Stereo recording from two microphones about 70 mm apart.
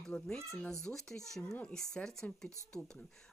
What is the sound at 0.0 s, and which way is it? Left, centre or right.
Speech, centre.